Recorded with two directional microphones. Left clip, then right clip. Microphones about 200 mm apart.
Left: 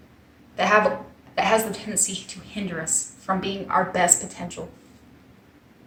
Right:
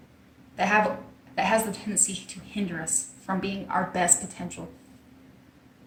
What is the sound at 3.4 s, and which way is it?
A woman's voice, 15° left (ahead or behind).